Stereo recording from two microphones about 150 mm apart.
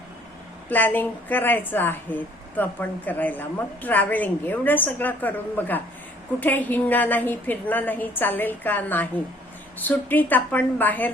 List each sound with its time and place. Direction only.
0.7 s a woman's voice: 10° left (ahead or behind)